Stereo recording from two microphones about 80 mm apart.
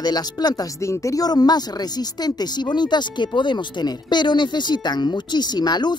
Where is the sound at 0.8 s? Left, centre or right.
Left.